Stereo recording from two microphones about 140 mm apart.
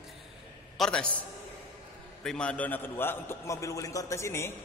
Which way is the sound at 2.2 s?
5° left (ahead or behind).